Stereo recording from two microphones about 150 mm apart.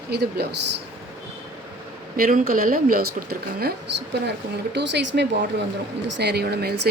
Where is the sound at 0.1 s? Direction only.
90° right.